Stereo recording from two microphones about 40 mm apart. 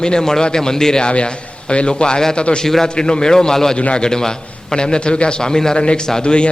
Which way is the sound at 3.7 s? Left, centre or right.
Left.